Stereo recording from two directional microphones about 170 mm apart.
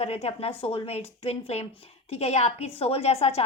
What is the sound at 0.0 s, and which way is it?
A woman's voice, 40° left (ahead or behind).